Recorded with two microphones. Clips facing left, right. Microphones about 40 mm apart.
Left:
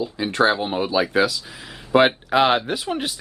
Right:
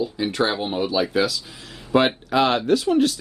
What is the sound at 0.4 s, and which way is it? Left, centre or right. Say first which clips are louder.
Speech: left 4 dB; centre.